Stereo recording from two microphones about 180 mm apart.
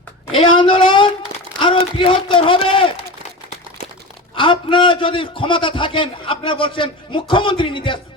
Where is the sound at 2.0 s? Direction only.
30° left (ahead or behind).